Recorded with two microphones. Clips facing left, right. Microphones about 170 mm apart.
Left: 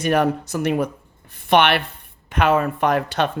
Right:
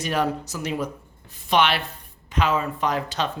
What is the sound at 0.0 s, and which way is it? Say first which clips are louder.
Speech: left 6 dB; 60° left (ahead or behind).